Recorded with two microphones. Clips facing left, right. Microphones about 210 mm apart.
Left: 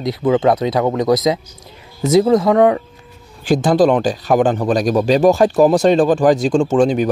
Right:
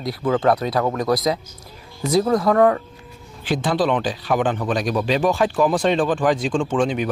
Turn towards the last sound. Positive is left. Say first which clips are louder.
# left 7 dB
turn(degrees=40)  # may be behind; listen again after turning